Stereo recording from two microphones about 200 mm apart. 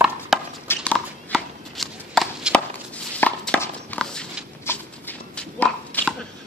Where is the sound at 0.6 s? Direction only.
10° left (ahead or behind).